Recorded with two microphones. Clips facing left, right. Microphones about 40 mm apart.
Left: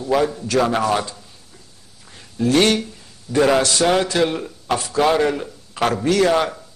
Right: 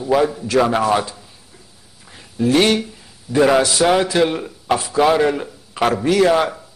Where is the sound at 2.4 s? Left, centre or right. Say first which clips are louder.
Right 1 dB; centre.